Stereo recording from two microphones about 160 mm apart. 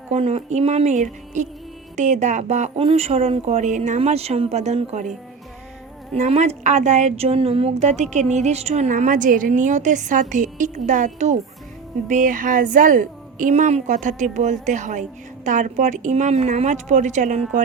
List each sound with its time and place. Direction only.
0.1 s a woman's voice: 40° right (ahead or behind)
6.1 s a woman's voice: 40° right (ahead or behind)